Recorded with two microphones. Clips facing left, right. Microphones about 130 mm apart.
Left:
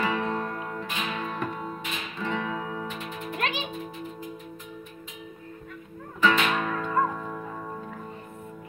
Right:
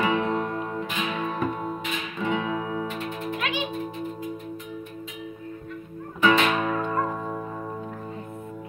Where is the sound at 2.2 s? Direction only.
15° right (ahead or behind).